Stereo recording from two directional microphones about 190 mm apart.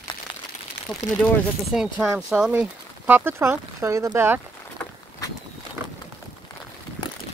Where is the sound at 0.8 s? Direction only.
65° left (ahead or behind).